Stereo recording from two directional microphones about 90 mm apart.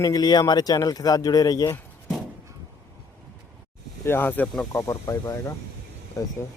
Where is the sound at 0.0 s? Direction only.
45° left (ahead or behind).